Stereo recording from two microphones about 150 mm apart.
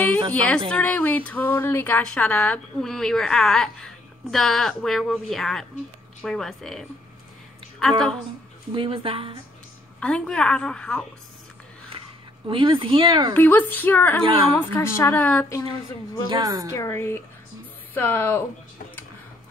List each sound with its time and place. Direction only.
0.3 s speech: 10° left (ahead or behind)
8.7 s speech: 40° right (ahead or behind)
9.9 s a woman's voice: 5° left (ahead or behind)
12.4 s speech: 35° right (ahead or behind)
13.3 s a woman's voice: 10° left (ahead or behind)
14.2 s speech: 35° right (ahead or behind)
14.5 s a woman's voice: 15° left (ahead or behind)
16.3 s a woman's voice: 25° right (ahead or behind)
16.7 s a woman's voice: 20° left (ahead or behind)